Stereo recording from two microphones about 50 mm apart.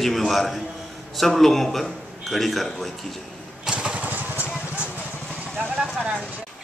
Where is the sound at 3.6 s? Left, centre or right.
Centre.